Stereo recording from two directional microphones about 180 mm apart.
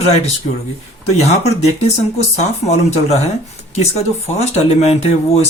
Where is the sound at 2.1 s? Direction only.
35° left (ahead or behind).